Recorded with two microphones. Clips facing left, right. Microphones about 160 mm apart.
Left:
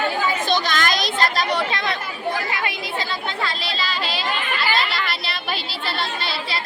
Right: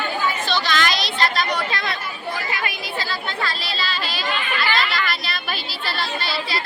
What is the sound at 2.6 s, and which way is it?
Speech, 25° left (ahead or behind).